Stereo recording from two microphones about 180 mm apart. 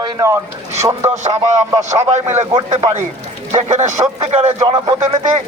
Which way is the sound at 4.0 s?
25° right (ahead or behind).